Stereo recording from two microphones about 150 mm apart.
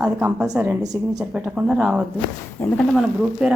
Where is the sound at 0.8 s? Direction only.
25° right (ahead or behind).